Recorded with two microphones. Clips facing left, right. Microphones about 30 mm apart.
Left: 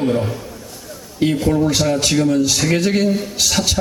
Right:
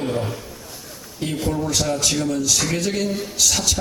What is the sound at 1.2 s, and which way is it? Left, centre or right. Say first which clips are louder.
A man's voice: left 8 dB; left.